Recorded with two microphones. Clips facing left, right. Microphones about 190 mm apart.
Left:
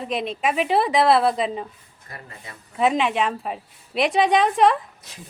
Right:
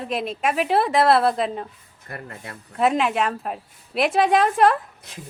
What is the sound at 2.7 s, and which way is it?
A woman's voice, centre (ahead or behind).